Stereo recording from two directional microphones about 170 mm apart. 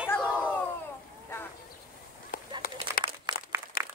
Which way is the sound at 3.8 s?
60° left (ahead or behind).